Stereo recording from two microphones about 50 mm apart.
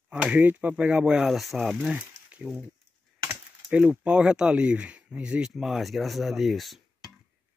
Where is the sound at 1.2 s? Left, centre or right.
Centre.